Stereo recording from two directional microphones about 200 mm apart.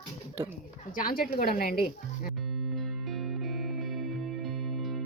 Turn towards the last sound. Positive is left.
turn(degrees=0)  # may be behind; listen again after turning